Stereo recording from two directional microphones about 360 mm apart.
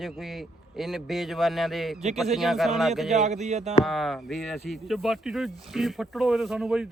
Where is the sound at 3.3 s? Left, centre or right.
Centre.